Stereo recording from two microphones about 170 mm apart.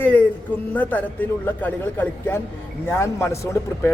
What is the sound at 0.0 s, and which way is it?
Speech, 10° left (ahead or behind).